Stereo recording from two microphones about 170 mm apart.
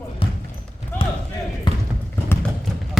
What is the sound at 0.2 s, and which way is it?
Basketball bounce, 30° left (ahead or behind).